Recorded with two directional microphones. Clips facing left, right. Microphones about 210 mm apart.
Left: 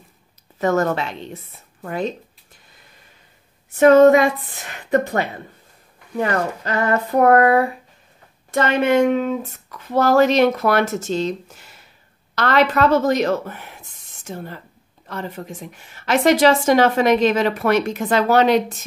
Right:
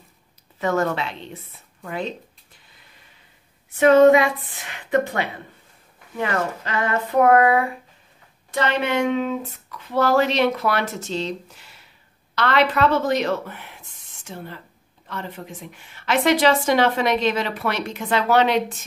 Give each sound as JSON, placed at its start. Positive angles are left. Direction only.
{"t": 0.6, "sound": "a woman's voice", "side_deg": 45}
{"t": 3.8, "sound": "a woman's voice", "side_deg": 45}